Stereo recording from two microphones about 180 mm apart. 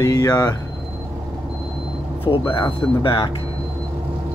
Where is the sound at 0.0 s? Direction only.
20° left (ahead or behind).